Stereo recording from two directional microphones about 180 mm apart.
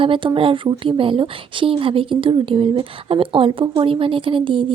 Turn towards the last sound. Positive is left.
turn(degrees=-30)  # may be behind; listen again after turning